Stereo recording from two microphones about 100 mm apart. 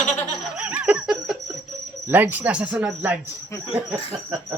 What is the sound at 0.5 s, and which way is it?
Laughter, 15° right (ahead or behind).